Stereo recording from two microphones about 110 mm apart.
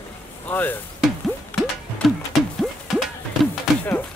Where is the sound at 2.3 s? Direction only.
Centre (ahead or behind).